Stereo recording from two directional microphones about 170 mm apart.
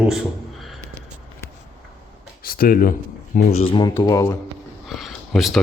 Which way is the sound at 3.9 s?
20° left (ahead or behind).